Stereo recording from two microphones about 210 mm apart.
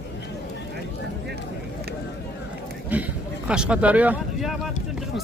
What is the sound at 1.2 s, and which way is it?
Vehicle, 50° right (ahead or behind).